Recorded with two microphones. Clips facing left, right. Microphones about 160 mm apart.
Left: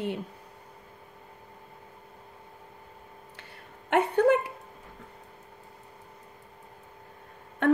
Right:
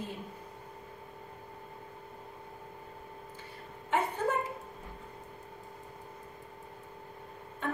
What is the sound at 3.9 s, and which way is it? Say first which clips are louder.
Speech: left 9 dB; 70° left (ahead or behind).